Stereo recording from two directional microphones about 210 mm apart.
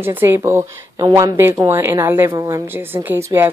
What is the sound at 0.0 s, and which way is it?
Speech, 10° right (ahead or behind).